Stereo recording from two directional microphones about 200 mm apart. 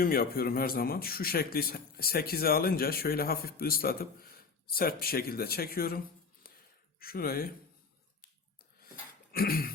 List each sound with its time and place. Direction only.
0.0 s speech: 45° left (ahead or behind)
7.0 s speech: 50° left (ahead or behind)
9.3 s speech: 45° left (ahead or behind)